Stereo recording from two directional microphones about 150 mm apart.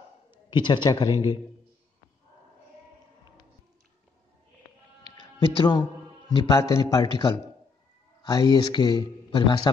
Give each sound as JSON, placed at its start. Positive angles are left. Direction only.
{"t": 0.3, "sound": "a sound", "side_deg": 30}
{"t": 0.8, "sound": "speech", "side_deg": 30}
{"t": 5.0, "sound": "a man's voice", "side_deg": 30}
{"t": 8.3, "sound": "speech", "side_deg": 25}